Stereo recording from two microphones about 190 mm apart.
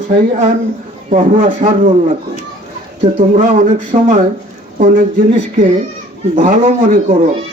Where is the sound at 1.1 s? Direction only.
40° right (ahead or behind).